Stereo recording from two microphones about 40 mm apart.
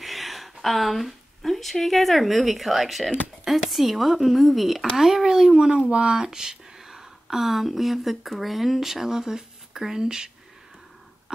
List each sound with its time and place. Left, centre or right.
0.0 s speech: centre
5.9 s speech: right
6.2 s speech: centre